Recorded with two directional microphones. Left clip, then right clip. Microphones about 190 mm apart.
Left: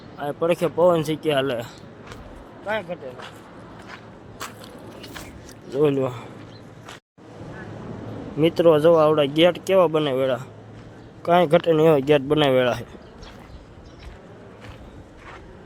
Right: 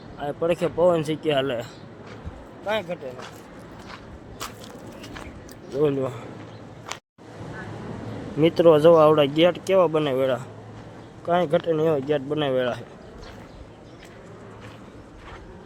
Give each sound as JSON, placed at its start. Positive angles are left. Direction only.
{"t": 0.2, "sound": "speech", "side_deg": 10}
{"t": 2.6, "sound": "speech", "side_deg": -10}
{"t": 5.8, "sound": "speech", "side_deg": 10}
{"t": 8.4, "sound": "speech", "side_deg": 0}
{"t": 11.2, "sound": "speech", "side_deg": 15}